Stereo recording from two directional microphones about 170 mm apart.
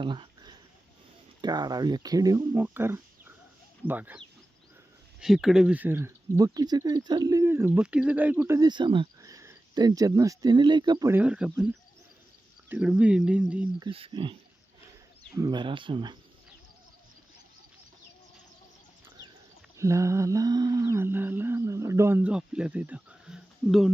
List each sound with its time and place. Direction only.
0.0 s a sound: 30° right (ahead or behind)
1.4 s speech: 25° right (ahead or behind)
3.8 s humming: 10° right (ahead or behind)
5.2 s speech: centre (ahead or behind); by 11.1 s 25° right (ahead or behind)
11.1 s humming: 5° right (ahead or behind)
13.7 s speech: 30° right (ahead or behind)
15.4 s speech: 25° right (ahead or behind)
19.7 s humming: 15° right (ahead or behind); by 23.9 s centre (ahead or behind)